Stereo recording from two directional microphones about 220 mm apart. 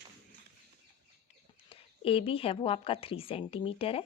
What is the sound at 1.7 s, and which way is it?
Speech, 25° left (ahead or behind).